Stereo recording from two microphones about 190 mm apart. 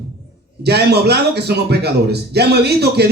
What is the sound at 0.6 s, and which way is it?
Speech, 60° right (ahead or behind).